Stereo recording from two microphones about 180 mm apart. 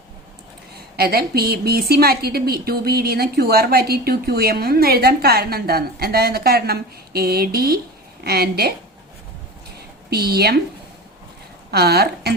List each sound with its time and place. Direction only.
0.9 s a woman's voice: 60° right (ahead or behind)
10.1 s a woman's voice: 60° right (ahead or behind)
11.7 s a woman's voice: 65° right (ahead or behind)